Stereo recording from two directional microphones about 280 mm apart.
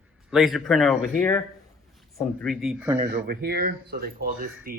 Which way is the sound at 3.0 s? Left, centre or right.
Right.